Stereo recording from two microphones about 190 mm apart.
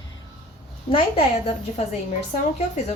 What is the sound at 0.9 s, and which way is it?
Speech, 30° left (ahead or behind).